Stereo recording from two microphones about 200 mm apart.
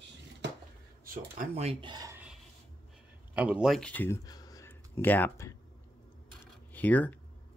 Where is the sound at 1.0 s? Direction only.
45° right (ahead or behind); by 2.2 s 20° right (ahead or behind).